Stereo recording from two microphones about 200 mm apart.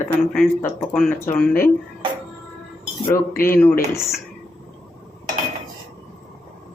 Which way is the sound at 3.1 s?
45° left (ahead or behind).